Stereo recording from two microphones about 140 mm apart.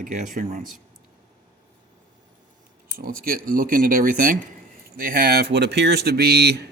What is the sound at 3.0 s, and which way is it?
Speech, 90° right.